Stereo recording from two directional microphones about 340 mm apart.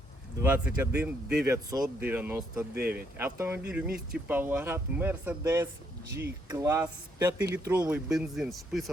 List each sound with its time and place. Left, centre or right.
0.4 s speech: centre
3.8 s speech: right
4.3 s speech: centre